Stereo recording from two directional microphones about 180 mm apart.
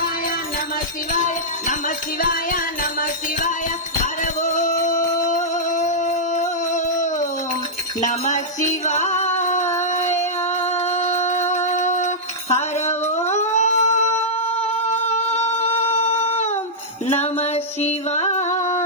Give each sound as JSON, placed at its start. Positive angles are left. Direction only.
{"t": 4.4, "sound": "music", "side_deg": 40}
{"t": 8.0, "sound": "music", "side_deg": 45}
{"t": 10.9, "sound": "a sound", "side_deg": 35}
{"t": 14.8, "sound": "humming", "side_deg": 40}
{"t": 17.1, "sound": "music", "side_deg": 35}